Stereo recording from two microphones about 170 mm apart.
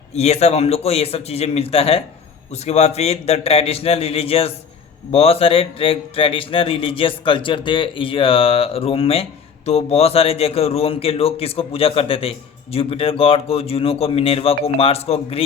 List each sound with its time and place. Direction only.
0.1 s a man's voice: 40° left (ahead or behind)